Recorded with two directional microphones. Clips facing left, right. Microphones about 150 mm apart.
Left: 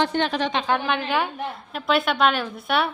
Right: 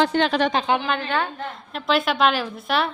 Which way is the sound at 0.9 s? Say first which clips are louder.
Even; 10° left (ahead or behind).